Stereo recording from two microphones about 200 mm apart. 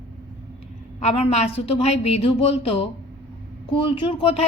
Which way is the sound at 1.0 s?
30° left (ahead or behind).